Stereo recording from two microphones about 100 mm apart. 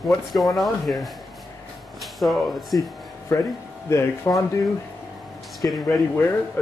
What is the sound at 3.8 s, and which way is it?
Speech, 30° left (ahead or behind).